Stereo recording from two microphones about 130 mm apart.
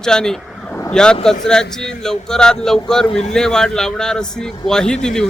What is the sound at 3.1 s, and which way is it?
Speech, 60° left (ahead or behind).